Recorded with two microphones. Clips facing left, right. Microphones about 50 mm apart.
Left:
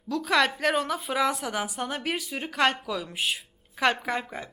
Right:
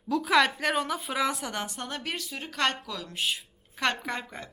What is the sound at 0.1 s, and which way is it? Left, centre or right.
A woman's voice, centre.